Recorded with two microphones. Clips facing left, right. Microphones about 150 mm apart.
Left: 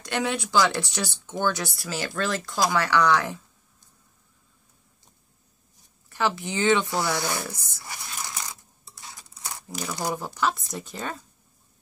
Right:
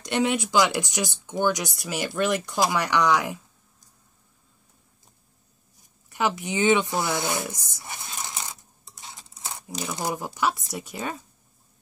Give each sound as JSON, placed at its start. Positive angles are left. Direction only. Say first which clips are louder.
{"t": 0.0, "sound": "speech", "louder": "right 3 dB", "side_deg": -20}
{"t": 6.0, "sound": "speech", "louder": "even", "side_deg": -15}